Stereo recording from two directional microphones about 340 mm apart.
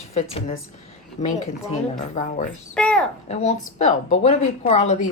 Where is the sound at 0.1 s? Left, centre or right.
Centre.